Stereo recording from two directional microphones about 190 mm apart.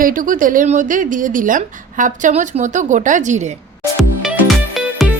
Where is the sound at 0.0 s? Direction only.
45° right (ahead or behind).